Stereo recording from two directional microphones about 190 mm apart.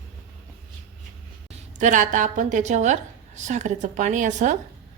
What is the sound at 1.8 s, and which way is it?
A woman's voice, 40° right (ahead or behind).